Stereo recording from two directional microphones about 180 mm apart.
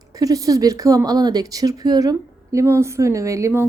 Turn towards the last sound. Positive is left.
turn(degrees=-15)  # may be behind; listen again after turning